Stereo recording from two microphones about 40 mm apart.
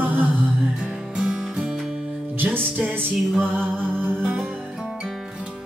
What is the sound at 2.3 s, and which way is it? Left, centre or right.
Music, right.